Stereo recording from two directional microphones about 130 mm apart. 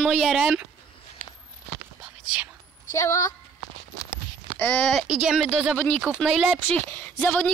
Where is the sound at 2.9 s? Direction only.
25° left (ahead or behind).